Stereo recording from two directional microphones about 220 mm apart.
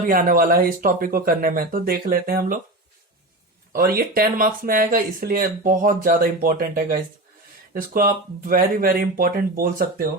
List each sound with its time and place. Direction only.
0.1 s speech: 40° right (ahead or behind)
3.7 s speech: 40° right (ahead or behind)